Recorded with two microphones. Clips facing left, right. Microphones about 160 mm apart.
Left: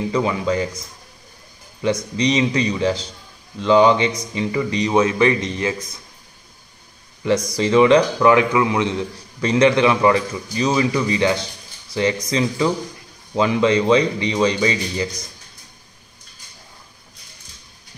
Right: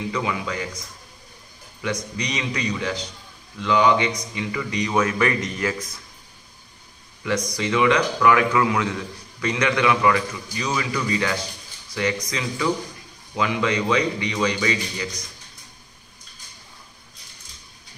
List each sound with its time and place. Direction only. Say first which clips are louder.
0.0 s speech: left 6 dB; 35° left (ahead or behind)
1.8 s speech: left 7 dB; 25° left (ahead or behind)
7.2 s speech: left 6 dB; 30° left (ahead or behind)